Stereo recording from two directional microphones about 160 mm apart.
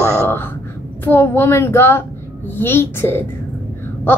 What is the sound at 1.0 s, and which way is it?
Speech, 15° left (ahead or behind).